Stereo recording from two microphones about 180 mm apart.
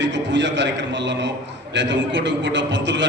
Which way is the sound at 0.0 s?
90° right.